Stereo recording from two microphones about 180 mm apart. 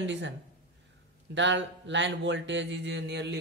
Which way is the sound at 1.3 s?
90° right.